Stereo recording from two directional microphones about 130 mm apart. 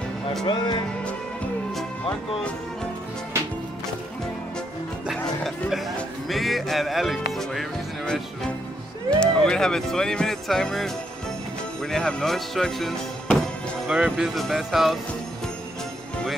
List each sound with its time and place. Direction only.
0.5 s speech: 35° left (ahead or behind)
5.0 s music: centre (ahead or behind)
9.2 s speech: 5° left (ahead or behind)